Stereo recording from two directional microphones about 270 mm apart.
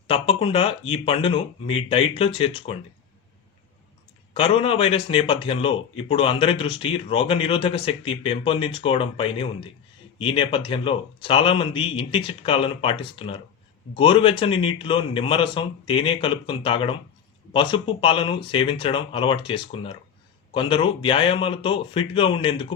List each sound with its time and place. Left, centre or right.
0.1 s speech: centre
4.4 s speech: centre